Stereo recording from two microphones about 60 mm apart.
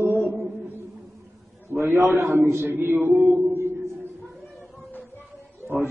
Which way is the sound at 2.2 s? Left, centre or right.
Right.